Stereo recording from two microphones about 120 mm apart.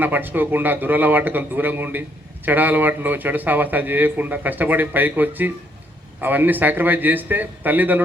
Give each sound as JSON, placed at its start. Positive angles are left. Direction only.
{"t": 0.0, "sound": "a man's voice", "side_deg": -15}